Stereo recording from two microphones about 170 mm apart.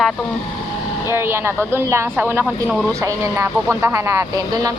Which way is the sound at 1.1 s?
15° right (ahead or behind).